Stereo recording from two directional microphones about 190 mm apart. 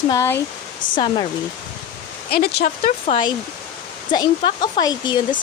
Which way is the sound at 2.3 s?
55° left (ahead or behind).